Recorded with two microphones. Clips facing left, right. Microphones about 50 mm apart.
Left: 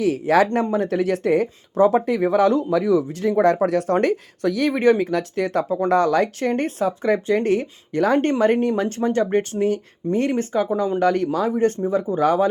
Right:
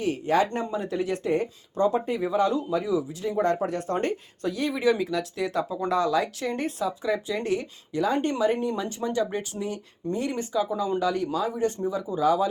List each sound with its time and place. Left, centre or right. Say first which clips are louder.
0.0 s speech: left 6 dB; left
0.7 s speech: left 7 dB; left
2.2 s speech: left 6 dB; left
3.7 s speech: left 9 dB; left
4.0 s speech: left 8 dB; left
4.7 s speech: left 6 dB; left
5.9 s speech: left 6 dB; left
9.0 s speech: left 8 dB; left